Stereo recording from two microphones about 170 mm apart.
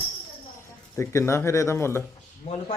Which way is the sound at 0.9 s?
15° left (ahead or behind).